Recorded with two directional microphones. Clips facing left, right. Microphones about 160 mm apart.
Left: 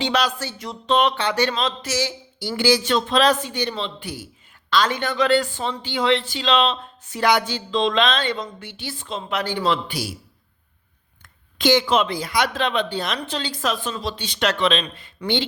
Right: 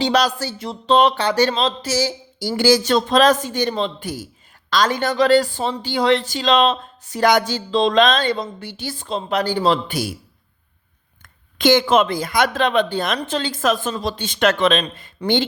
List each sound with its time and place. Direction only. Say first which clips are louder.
0.0 s speech: right 4 dB; 40° right (ahead or behind)
11.5 s speech: right 3 dB; 50° right (ahead or behind)